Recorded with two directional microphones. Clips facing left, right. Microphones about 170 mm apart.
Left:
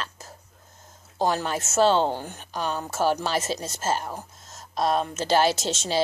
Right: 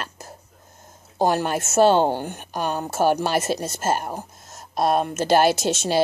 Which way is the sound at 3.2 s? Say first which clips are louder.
Right 4 dB; 60° right (ahead or behind).